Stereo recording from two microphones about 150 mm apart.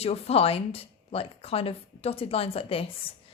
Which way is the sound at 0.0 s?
40° left (ahead or behind).